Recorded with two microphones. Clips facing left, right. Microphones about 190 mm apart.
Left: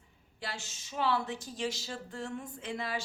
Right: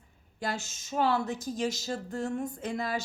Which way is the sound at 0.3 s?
45° right (ahead or behind).